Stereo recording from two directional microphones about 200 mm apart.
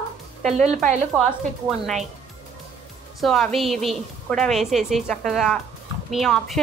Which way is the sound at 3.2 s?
Centre (ahead or behind).